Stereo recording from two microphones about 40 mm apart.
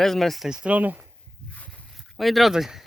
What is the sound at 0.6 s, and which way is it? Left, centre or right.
Speech, right.